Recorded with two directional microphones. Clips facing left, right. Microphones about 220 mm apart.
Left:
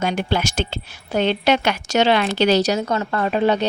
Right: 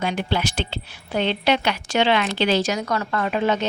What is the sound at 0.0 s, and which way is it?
A woman's voice, 45° left (ahead or behind).